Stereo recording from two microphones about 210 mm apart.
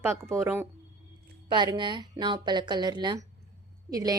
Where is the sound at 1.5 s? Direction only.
20° right (ahead or behind).